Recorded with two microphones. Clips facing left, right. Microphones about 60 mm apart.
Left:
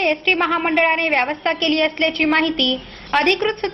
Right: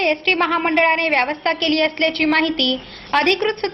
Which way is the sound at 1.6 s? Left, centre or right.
Centre.